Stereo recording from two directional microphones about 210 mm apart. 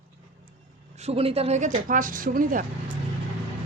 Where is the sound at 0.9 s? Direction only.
30° right (ahead or behind).